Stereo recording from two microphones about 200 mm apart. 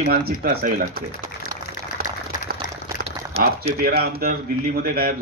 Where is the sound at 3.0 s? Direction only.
30° right (ahead or behind).